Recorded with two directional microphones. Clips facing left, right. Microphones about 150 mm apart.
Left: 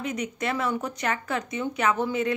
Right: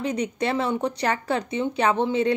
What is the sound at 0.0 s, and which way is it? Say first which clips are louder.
Speech: right 4 dB; 30° right (ahead or behind).